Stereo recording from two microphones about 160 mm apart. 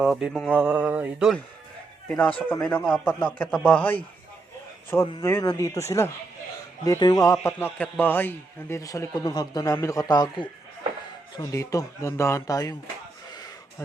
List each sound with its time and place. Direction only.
0.0 s speech: 5° right (ahead or behind)
2.0 s speech: 10° left (ahead or behind)
5.2 s a man's voice: 20° left (ahead or behind)